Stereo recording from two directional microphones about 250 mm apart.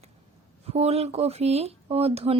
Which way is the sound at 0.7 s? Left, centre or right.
Right.